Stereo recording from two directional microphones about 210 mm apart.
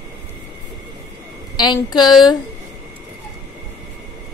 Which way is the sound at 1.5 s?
20° left (ahead or behind).